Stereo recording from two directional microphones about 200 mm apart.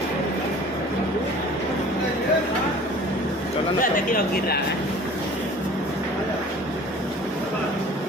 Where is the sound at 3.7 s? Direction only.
45° left (ahead or behind).